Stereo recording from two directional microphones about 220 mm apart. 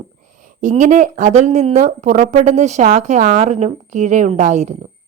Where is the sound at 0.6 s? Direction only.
35° right (ahead or behind).